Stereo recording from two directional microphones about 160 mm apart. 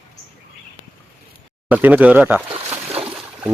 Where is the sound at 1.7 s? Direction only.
10° right (ahead or behind).